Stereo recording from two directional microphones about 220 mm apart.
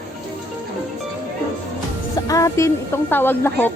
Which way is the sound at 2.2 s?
15° left (ahead or behind).